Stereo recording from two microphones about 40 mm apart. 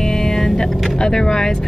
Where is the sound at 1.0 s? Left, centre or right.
Centre.